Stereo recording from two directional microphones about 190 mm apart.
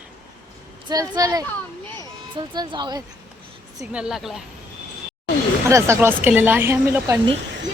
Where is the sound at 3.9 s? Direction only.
5° right (ahead or behind).